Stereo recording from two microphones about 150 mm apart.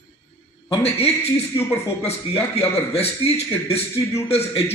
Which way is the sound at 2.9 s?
45° left (ahead or behind).